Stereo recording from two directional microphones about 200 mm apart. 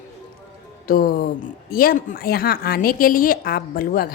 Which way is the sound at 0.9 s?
45° left (ahead or behind).